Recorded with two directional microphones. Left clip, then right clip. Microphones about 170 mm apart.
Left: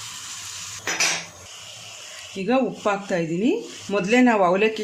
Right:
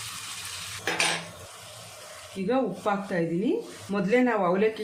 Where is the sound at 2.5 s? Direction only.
65° left (ahead or behind).